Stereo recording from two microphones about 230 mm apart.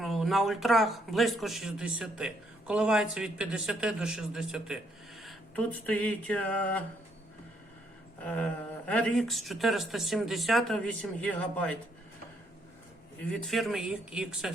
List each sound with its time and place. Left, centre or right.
0.0 s a man's voice: centre
5.2 s a sound: centre
8.2 s a man's voice: centre
13.3 s a man's voice: centre